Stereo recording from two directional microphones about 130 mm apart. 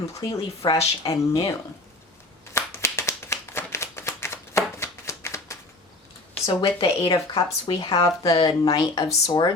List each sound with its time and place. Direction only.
0.1 s speech: 30° left (ahead or behind)
2.5 s clapping: 20° left (ahead or behind)
6.4 s speech: 40° left (ahead or behind)
7.9 s speech: 25° left (ahead or behind)